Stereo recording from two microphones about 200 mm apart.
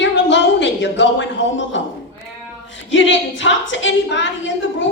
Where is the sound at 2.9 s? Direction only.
65° left (ahead or behind).